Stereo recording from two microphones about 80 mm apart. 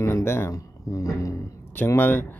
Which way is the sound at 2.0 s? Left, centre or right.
Left.